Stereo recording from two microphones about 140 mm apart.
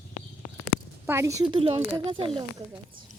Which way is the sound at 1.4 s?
35° right (ahead or behind).